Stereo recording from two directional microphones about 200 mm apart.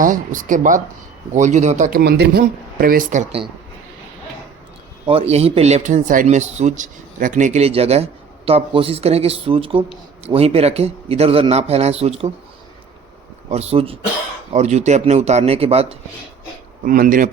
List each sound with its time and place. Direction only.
0.0 s speech: 40° right (ahead or behind)
5.0 s speech: 30° right (ahead or behind)
13.5 s speech: 30° right (ahead or behind)
16.8 s speech: 45° right (ahead or behind)